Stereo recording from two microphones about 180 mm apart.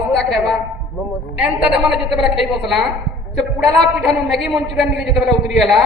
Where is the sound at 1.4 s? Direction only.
5° right (ahead or behind).